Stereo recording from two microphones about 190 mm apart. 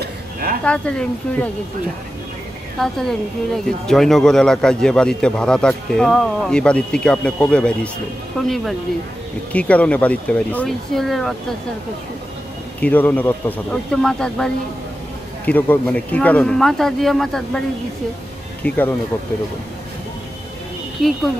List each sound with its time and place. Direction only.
0.0 s a sound: 50° right (ahead or behind)
0.7 s speech: 5° left (ahead or behind)
2.8 s speech: centre (ahead or behind)
9.5 s speech: 5° left (ahead or behind)
12.8 s speech: 10° left (ahead or behind)
21.0 s speech: centre (ahead or behind)